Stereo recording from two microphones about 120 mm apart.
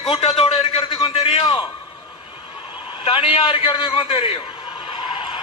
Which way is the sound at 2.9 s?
45° left (ahead or behind).